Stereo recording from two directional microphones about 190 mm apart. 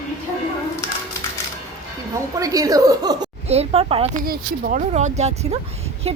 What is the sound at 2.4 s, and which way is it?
Speech, 15° right (ahead or behind).